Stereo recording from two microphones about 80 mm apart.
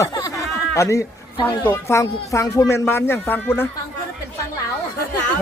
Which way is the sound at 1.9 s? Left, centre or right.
Left.